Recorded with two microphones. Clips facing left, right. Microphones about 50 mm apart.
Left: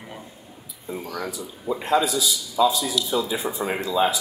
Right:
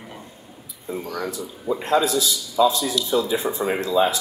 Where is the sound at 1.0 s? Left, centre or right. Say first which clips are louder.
Right 2 dB; centre.